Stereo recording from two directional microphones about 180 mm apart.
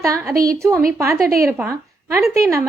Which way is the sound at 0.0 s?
15° right (ahead or behind).